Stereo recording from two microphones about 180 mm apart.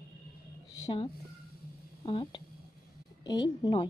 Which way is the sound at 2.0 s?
30° left (ahead or behind).